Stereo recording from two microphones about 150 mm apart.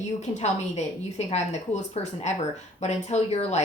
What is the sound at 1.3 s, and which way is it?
A woman's voice, 45° left (ahead or behind).